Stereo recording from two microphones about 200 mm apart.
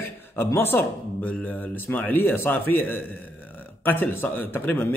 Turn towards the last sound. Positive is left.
turn(degrees=10)  # may be behind; listen again after turning